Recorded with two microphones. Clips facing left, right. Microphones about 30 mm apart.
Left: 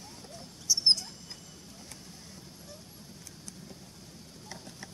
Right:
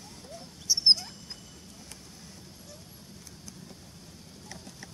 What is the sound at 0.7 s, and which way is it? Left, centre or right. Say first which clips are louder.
Dog: right 2 dB; right.